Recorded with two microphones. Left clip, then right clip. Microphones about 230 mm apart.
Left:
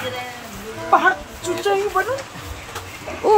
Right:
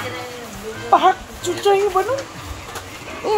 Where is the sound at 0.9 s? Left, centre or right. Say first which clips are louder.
Right 1 dB; right.